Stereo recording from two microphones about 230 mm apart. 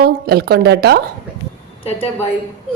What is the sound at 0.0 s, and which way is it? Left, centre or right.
A woman's voice, right.